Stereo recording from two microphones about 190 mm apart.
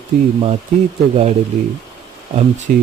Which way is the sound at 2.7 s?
45° right (ahead or behind).